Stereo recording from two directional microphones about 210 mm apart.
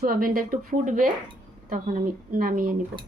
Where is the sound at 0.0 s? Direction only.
45° right (ahead or behind).